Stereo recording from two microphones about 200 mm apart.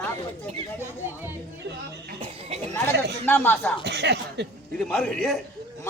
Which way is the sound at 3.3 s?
10° left (ahead or behind).